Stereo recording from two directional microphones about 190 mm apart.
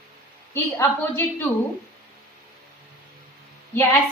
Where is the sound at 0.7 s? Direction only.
10° left (ahead or behind).